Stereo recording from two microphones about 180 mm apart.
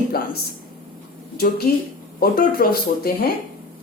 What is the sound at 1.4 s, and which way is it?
Speech, 60° left (ahead or behind).